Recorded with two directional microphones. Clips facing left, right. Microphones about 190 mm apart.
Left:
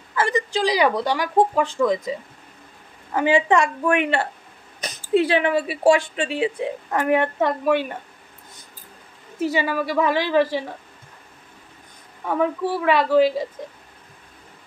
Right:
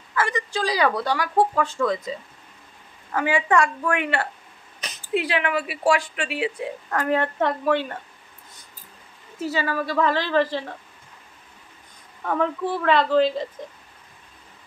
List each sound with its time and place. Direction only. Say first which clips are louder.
0.1 s a woman's voice: left 3 dB; 25° left (ahead or behind)
9.4 s a woman's voice: left 3 dB; 15° left (ahead or behind)
12.3 s a woman's voice: left 2 dB; 10° left (ahead or behind)